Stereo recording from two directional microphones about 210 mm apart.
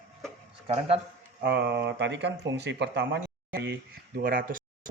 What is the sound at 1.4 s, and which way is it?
Speech, 50° right (ahead or behind).